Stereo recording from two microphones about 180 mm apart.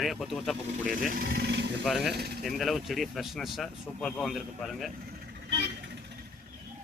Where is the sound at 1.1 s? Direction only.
55° right (ahead or behind); by 1.7 s 70° right (ahead or behind).